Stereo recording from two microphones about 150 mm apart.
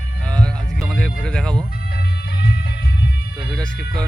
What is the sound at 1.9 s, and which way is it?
Music, 90° left.